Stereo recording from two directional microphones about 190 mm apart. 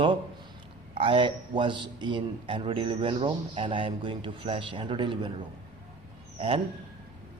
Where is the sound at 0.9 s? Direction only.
25° right (ahead or behind).